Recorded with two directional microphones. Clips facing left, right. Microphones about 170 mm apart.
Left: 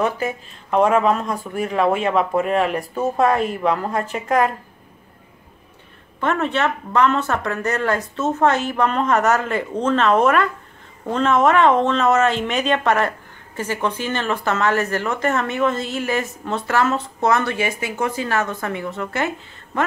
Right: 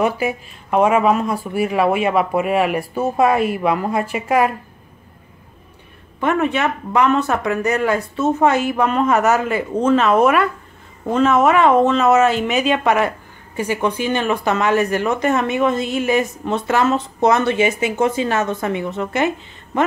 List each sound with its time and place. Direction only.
0.0 s speech: 10° right (ahead or behind)
6.2 s speech: 10° right (ahead or behind)